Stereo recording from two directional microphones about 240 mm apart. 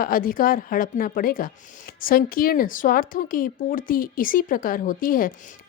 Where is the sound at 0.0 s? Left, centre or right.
Left.